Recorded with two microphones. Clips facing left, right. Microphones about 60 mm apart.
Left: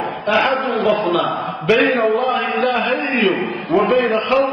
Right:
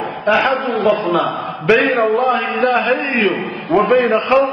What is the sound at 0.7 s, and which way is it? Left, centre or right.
Speech, centre.